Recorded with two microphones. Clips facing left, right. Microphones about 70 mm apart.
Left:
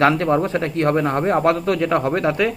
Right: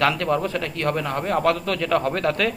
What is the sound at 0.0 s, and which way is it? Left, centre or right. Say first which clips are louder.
A man's voice: left 5 dB; left.